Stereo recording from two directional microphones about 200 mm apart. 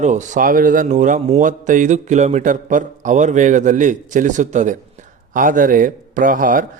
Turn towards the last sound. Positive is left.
turn(degrees=-45)  # may be behind; listen again after turning